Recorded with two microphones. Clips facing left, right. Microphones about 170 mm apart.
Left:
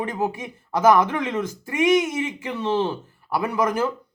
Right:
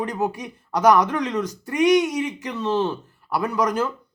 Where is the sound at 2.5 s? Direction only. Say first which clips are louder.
Even; 10° left (ahead or behind).